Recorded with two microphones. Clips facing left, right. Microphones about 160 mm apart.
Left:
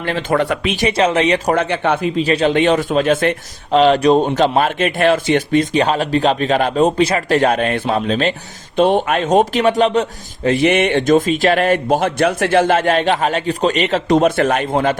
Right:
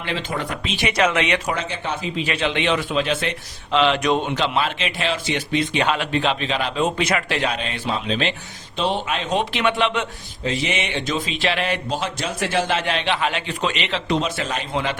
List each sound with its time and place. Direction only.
0.0 s speech: 50° left (ahead or behind)
0.3 s speech: 70° left (ahead or behind)
0.8 s a man's voice: 30° left (ahead or behind)
1.5 s speech: 60° left (ahead or behind)
2.1 s a man's voice: 40° left (ahead or behind)
7.3 s speech: 50° left (ahead or behind)
10.4 s speech: 55° left (ahead or behind)